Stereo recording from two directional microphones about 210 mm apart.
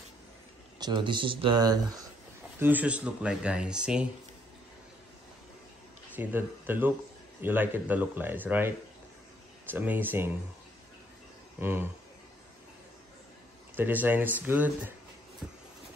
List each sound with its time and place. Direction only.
0.7 s speech: 20° right (ahead or behind)
2.6 s speech: 5° right (ahead or behind)
6.1 s speech: 10° right (ahead or behind)
11.6 s speech: 10° right (ahead or behind)
13.7 s speech: 10° right (ahead or behind)